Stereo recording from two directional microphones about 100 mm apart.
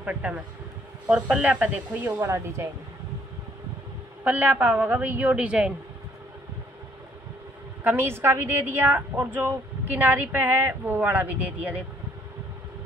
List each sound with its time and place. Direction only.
0.0 s a woman's voice: 15° right (ahead or behind)
2.2 s a woman's voice: 30° right (ahead or behind)
4.2 s a woman's voice: 15° right (ahead or behind)
7.8 s a woman's voice: 25° right (ahead or behind)